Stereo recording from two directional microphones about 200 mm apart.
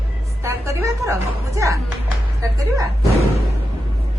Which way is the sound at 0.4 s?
15° right (ahead or behind).